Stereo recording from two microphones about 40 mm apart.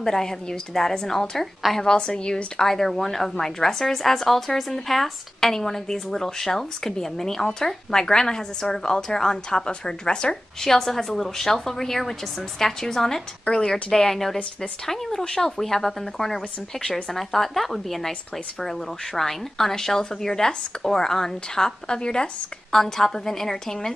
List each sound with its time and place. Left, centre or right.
0.0 s speech: centre
13.5 s speech: left
14.0 s speech: centre
22.8 s speech: centre